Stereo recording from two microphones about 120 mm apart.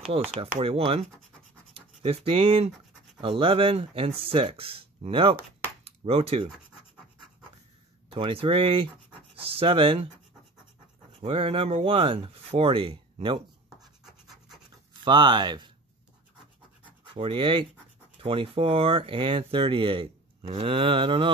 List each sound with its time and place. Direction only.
0.4 s speech: 55° right (ahead or behind)
8.1 s speech: 50° right (ahead or behind)
11.1 s speech: 50° right (ahead or behind)
15.0 s speech: 40° right (ahead or behind)
17.0 s speech: 45° right (ahead or behind)